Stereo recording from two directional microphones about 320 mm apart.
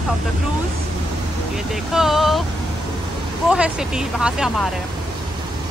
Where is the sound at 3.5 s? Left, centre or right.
Centre.